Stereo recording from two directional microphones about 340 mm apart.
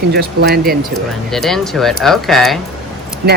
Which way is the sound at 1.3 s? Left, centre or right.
Centre.